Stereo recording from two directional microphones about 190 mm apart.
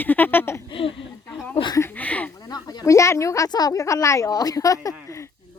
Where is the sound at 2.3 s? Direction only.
20° left (ahead or behind).